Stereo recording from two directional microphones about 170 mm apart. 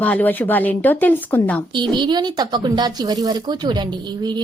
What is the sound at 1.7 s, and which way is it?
A woman's voice, 25° right (ahead or behind).